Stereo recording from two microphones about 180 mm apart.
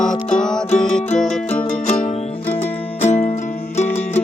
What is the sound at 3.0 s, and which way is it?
Music, 35° left (ahead or behind).